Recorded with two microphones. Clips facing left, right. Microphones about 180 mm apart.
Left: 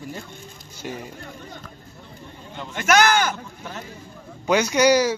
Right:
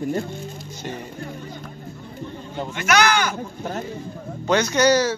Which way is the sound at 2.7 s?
45° left (ahead or behind).